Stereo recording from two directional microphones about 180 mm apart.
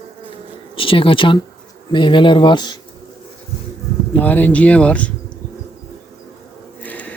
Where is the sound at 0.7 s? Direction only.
30° left (ahead or behind).